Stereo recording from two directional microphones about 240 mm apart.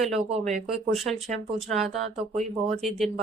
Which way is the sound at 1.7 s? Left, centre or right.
Right.